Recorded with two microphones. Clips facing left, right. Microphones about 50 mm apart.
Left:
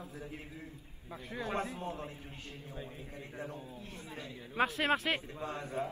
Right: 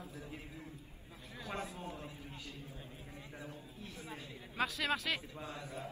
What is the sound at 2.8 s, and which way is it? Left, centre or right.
Speech, left.